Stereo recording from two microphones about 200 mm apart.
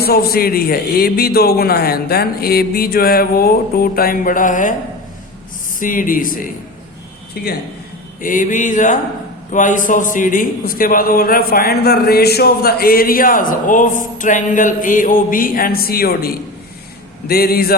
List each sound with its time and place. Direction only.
0.0 s a man's voice: 50° left (ahead or behind)
5.8 s a man's voice: 45° left (ahead or behind)
8.2 s a sound: 40° left (ahead or behind)
9.5 s a man's voice: 40° left (ahead or behind)